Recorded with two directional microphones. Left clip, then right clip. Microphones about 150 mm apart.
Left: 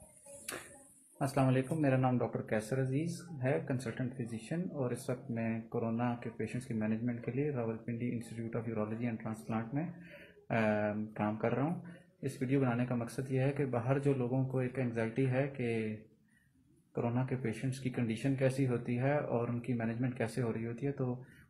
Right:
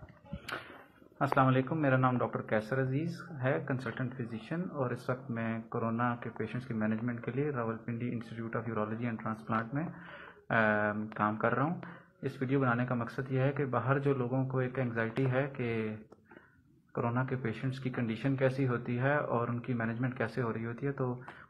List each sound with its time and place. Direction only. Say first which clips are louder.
1.1 s speech: right 5 dB; 5° left (ahead or behind)
2.0 s speech: right 3 dB; 15° left (ahead or behind)
5.7 s speech: right 2 dB; 5° left (ahead or behind)
5.9 s speech: right 3 dB; 15° left (ahead or behind)
16.9 s speech: right 3 dB; 5° left (ahead or behind)